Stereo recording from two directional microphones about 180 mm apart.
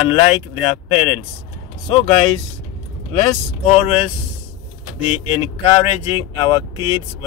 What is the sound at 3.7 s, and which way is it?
Speech, 30° left (ahead or behind).